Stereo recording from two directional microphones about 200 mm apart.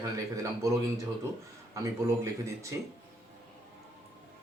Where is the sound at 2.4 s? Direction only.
15° right (ahead or behind).